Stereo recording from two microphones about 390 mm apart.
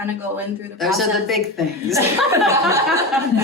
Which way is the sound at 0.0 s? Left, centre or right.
Centre.